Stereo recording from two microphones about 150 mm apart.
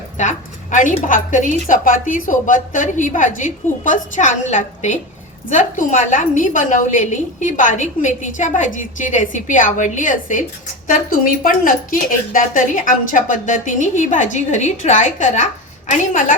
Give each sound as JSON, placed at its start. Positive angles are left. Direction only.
{"t": 0.2, "sound": "a woman's voice", "side_deg": 55}